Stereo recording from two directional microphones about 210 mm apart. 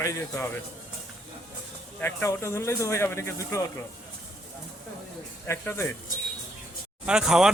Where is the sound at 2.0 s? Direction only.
10° left (ahead or behind).